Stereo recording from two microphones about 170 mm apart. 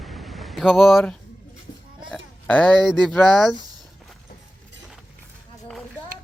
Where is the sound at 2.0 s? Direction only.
5° left (ahead or behind).